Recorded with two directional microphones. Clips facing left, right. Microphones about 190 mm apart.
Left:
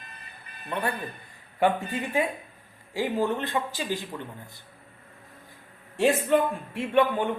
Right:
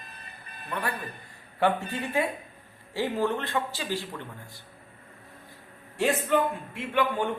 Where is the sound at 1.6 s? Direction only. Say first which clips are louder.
Left 1 dB; 15° left (ahead or behind).